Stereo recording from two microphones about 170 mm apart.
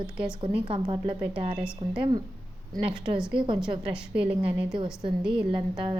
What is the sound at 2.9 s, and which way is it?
Speech, 30° right (ahead or behind).